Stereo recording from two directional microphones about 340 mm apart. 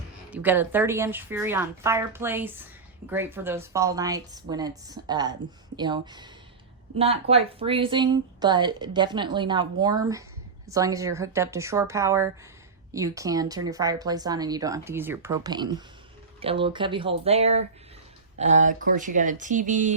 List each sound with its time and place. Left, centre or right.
0.3 s speech: centre; by 19.9 s right